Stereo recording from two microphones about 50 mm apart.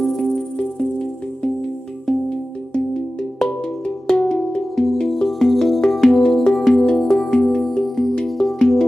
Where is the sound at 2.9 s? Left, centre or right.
Centre.